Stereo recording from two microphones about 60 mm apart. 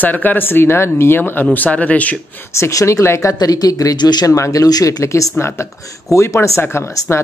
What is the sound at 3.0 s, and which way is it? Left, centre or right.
Speech, left.